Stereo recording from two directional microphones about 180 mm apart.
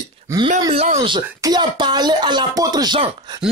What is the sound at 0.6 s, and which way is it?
Speech, 35° right (ahead or behind).